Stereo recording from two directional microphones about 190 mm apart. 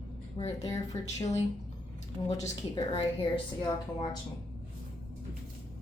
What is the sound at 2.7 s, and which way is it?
Speech, 25° left (ahead or behind).